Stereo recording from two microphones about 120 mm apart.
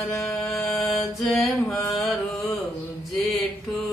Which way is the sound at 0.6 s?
Centre (ahead or behind).